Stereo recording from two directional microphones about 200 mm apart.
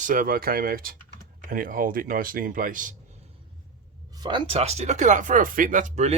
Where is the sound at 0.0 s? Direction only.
45° right (ahead or behind).